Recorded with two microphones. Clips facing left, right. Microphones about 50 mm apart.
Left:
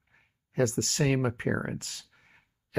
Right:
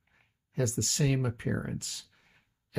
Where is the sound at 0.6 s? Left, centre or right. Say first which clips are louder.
Left 4 dB; left.